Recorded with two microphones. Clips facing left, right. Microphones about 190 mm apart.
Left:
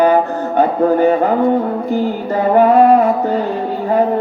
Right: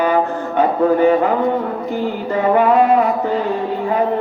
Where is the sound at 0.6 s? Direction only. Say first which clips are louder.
Left 1 dB; 40° left (ahead or behind).